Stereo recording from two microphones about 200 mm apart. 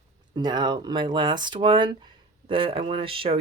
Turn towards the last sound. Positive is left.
turn(degrees=-25)  # may be behind; listen again after turning